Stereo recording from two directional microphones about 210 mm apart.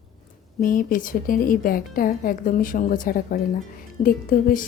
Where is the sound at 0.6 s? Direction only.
40° left (ahead or behind).